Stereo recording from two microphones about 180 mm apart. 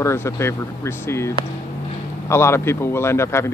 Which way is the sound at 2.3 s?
15° left (ahead or behind).